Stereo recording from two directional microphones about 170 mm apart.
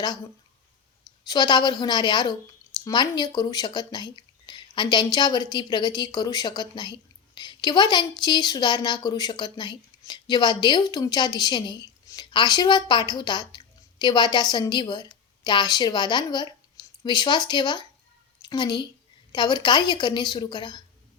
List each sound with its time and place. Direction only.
1.3 s a woman's voice: 25° left (ahead or behind)